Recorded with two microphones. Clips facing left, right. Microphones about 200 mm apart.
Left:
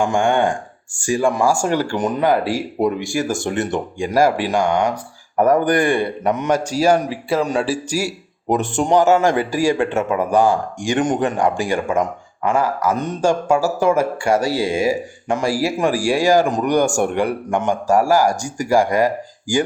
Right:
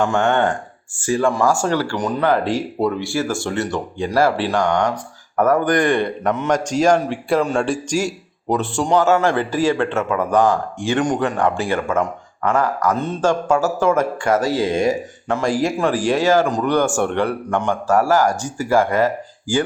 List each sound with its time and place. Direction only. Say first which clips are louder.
0.0 s a man's voice: even; 10° left (ahead or behind)
8.4 s a man's voice: left 1 dB; 20° left (ahead or behind)